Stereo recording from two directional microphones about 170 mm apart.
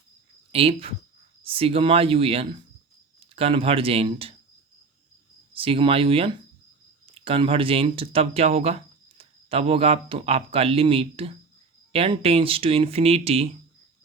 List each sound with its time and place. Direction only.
0.5 s speech: 35° right (ahead or behind)
5.5 s speech: 30° right (ahead or behind)